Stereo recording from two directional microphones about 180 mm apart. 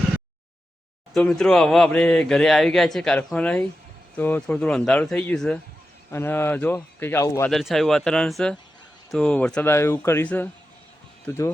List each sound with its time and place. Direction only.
1.1 s speech: 5° left (ahead or behind)
7.5 s speech: centre (ahead or behind); by 11.5 s 15° left (ahead or behind)